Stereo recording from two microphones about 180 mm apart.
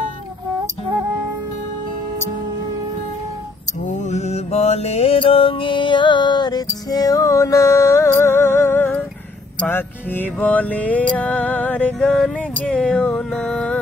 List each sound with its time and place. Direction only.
3.8 s mantra: 40° left (ahead or behind); by 9.0 s 10° left (ahead or behind)
9.6 s music: 10° left (ahead or behind)